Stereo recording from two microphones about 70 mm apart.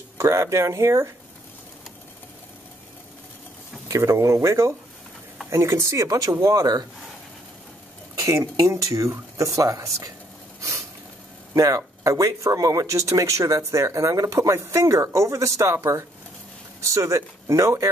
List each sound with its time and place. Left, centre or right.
0.2 s speech: right
3.9 s speech: right
6.0 s speech: right
8.2 s speech: right
11.5 s speech: right